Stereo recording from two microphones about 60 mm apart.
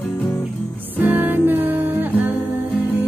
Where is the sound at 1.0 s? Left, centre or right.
Right.